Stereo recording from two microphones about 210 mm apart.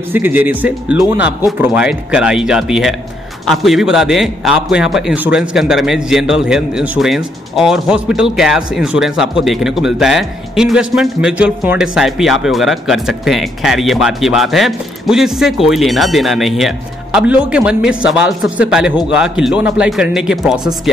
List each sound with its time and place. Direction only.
0.1 s a man's voice: 10° right (ahead or behind)